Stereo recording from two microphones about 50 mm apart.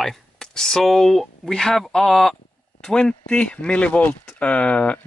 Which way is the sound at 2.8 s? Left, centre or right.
Centre.